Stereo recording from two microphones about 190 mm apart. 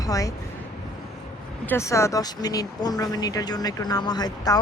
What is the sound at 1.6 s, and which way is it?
Speech, 15° left (ahead or behind).